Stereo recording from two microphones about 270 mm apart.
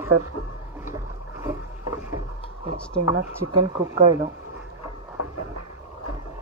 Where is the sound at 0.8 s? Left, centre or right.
Centre.